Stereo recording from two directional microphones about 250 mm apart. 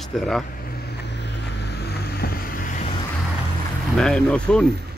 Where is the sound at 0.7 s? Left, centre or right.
Left.